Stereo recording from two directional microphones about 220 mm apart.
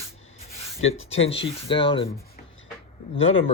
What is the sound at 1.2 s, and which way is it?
Speech, 25° left (ahead or behind).